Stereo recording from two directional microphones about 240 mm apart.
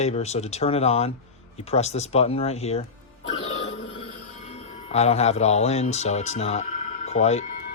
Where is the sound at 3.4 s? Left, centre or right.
Left.